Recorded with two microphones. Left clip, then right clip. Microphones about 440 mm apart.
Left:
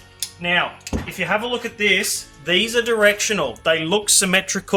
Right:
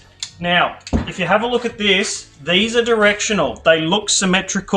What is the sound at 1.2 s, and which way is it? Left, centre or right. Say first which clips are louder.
Speech: right 5 dB; left.